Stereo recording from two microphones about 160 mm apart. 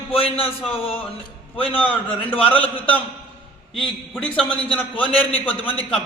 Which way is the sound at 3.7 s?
5° left (ahead or behind).